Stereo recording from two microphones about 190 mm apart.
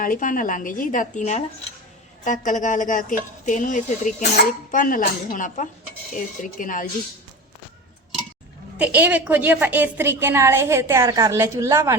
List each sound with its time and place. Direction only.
0.0 s a woman's voice: 45° left (ahead or behind)
8.8 s a woman's voice: 10° right (ahead or behind)